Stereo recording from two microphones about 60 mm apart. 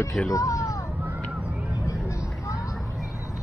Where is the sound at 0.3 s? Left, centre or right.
Left.